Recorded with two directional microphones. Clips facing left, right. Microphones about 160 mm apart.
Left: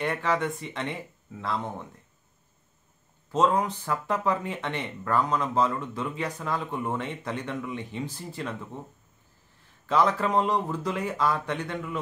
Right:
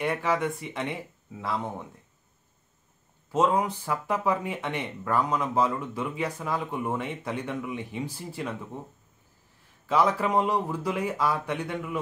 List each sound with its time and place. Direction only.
0.0 s speech: 10° right (ahead or behind)
3.3 s speech: 10° right (ahead or behind)
9.8 s speech: 10° right (ahead or behind)